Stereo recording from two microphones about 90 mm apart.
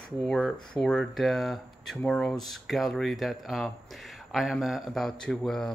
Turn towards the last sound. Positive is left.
turn(degrees=5)  # may be behind; listen again after turning